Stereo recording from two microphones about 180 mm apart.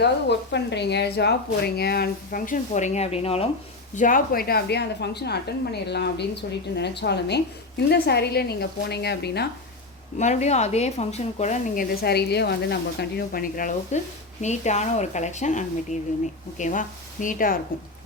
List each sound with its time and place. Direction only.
0.0 s a woman's voice: 70° left (ahead or behind); by 3.5 s 35° left (ahead or behind)
3.9 s a woman's voice: 50° left (ahead or behind); by 9.5 s 65° left (ahead or behind)
10.2 s a woman's voice: 40° left (ahead or behind)